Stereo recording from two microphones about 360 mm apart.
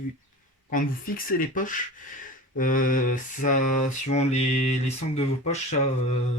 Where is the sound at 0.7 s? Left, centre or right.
Left.